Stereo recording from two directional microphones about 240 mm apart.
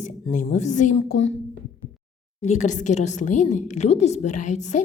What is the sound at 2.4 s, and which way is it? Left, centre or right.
A woman's voice, left.